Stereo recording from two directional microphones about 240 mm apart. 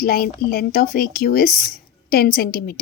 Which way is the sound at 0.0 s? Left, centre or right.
Left.